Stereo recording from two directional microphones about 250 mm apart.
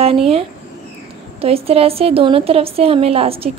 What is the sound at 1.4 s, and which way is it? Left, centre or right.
A woman's voice, right.